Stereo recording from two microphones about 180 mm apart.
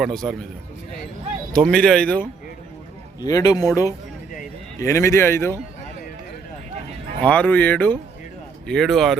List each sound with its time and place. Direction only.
0.0 s speech: centre (ahead or behind)
1.5 s speech: 5° left (ahead or behind)
3.2 s speech: 20° left (ahead or behind)
7.2 s speech: 5° left (ahead or behind)